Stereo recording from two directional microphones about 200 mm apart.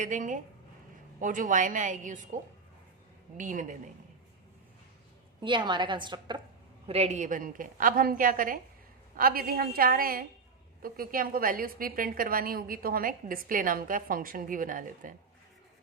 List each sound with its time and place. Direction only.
0.0 s a woman's voice: 40° right (ahead or behind)
5.4 s a woman's voice: 25° right (ahead or behind); by 15.1 s 40° right (ahead or behind)